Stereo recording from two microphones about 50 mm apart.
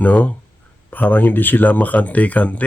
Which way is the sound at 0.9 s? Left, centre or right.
Left.